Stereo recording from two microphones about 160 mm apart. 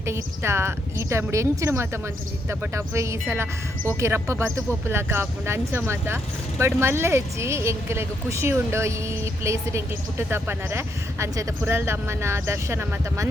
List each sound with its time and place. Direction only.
0.0 s speech: 15° right (ahead or behind)